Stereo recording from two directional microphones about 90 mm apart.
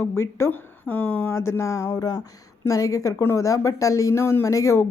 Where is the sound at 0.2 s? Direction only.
30° left (ahead or behind).